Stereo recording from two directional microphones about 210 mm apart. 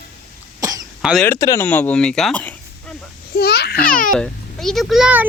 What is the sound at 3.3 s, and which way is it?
Speech, 50° left (ahead or behind).